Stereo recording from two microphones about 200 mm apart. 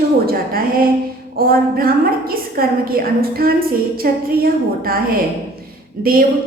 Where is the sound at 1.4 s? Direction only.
50° right (ahead or behind).